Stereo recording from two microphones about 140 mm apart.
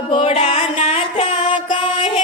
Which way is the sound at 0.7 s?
50° left (ahead or behind).